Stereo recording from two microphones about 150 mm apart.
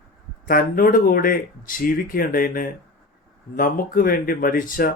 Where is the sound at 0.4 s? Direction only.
70° left (ahead or behind).